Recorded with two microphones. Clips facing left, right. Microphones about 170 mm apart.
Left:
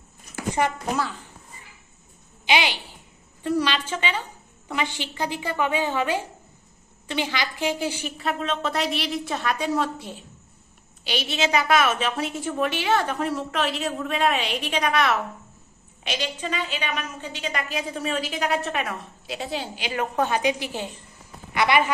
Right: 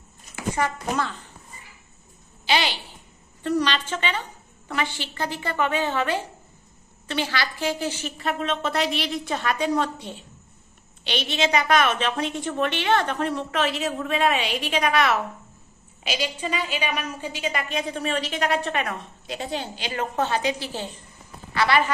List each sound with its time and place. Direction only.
0.6 s speech: 20° left (ahead or behind)
2.4 s a woman's voice: 15° left (ahead or behind)
8.2 s a woman's voice: centre (ahead or behind); by 21.9 s 15° left (ahead or behind)